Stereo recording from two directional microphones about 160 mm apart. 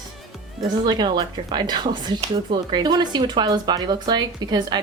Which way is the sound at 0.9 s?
25° right (ahead or behind).